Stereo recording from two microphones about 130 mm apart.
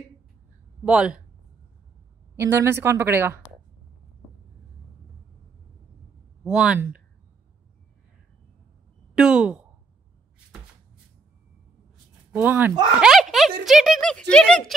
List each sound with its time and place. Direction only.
0.8 s speech: 5° right (ahead or behind)
2.3 s a woman's voice: 20° right (ahead or behind)
6.4 s speech: 5° right (ahead or behind)
9.1 s speech: 5° right (ahead or behind)
12.3 s speech: 15° right (ahead or behind)
13.0 s speech: centre (ahead or behind)